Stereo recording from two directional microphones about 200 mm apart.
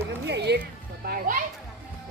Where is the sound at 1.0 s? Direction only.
45° right (ahead or behind).